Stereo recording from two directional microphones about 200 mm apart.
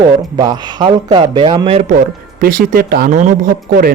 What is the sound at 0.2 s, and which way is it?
Speech, 20° right (ahead or behind).